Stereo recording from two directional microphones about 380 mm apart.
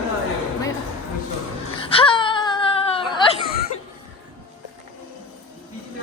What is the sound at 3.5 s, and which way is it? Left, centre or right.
Cough, left.